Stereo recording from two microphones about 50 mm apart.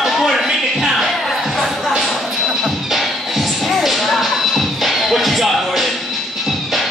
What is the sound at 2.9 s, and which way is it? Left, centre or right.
Music, centre.